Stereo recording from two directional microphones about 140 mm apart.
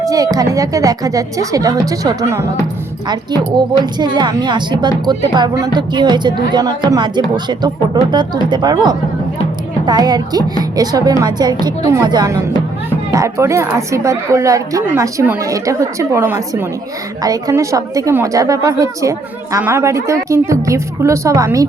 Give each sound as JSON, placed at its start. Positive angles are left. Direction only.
{"t": 0.0, "sound": "a woman's voice", "side_deg": -25}